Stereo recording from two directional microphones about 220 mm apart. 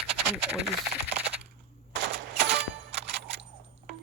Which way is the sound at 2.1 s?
50° right (ahead or behind).